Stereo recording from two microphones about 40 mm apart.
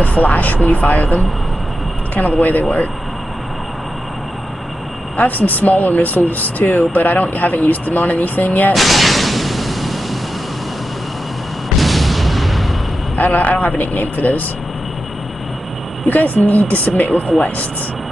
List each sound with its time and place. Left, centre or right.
0.0 s speech: left
5.1 s speech: left
8.7 s a sound: centre
11.8 s artillery fire: centre
13.2 s speech: left
16.1 s speech: left